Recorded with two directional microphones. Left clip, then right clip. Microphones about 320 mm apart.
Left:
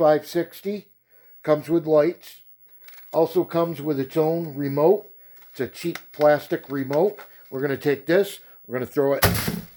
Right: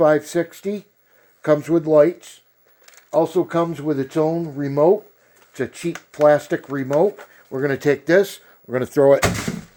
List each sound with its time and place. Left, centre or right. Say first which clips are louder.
0.0 s speech: right 3 dB; right